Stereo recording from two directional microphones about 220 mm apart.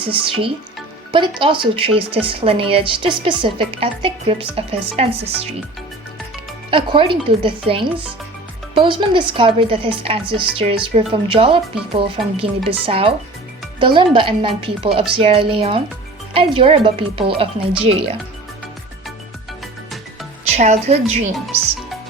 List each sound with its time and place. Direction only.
0.0 s a woman's voice: 25° right (ahead or behind)
6.7 s a woman's voice: 25° right (ahead or behind)
20.6 s a woman's voice: 30° right (ahead or behind)